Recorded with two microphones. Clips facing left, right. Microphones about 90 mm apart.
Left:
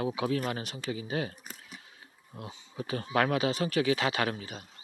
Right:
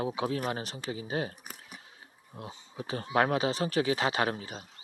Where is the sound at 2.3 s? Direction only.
30° right (ahead or behind).